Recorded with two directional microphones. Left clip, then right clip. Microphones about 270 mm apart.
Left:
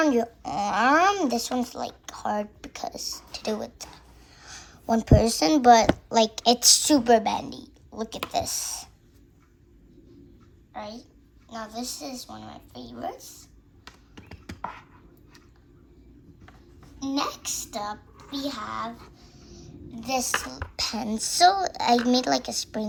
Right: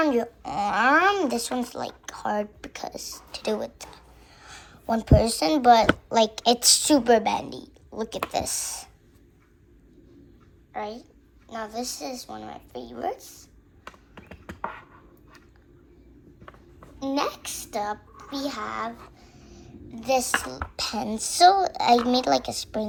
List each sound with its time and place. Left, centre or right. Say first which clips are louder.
0.0 s a woman's voice: even; left
10.8 s a woman's voice: right 4 dB; centre
14.2 s beatboxing: right 2 dB; centre
17.0 s a woman's voice: right 2 dB; centre
18.3 s a sound: right 1 dB; centre
19.9 s speech: right 3 dB; centre